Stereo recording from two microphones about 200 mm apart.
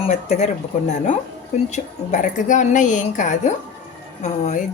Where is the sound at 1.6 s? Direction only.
35° left (ahead or behind).